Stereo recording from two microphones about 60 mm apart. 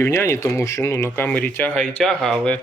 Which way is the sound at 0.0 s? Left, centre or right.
Left.